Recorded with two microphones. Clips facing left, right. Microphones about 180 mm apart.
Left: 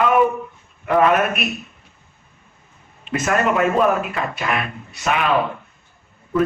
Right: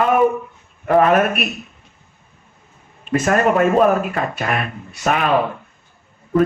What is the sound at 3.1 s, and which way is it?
A man's voice, 40° right (ahead or behind).